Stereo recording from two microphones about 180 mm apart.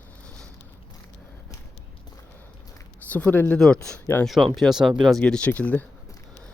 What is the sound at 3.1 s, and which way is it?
Speech, 10° left (ahead or behind).